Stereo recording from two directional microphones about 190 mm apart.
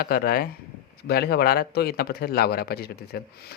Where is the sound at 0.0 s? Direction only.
50° left (ahead or behind).